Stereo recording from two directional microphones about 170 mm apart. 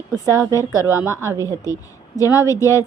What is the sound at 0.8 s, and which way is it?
Speech, 20° right (ahead or behind).